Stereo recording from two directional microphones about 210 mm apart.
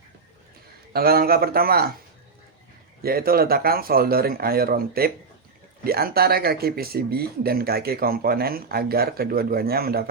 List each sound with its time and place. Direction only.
0.9 s speech: 45° right (ahead or behind)
3.0 s speech: 45° right (ahead or behind)